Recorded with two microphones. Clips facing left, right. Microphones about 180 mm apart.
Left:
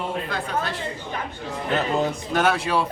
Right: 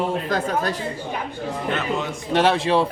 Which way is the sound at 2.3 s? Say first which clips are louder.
Right 6 dB; 30° right (ahead or behind).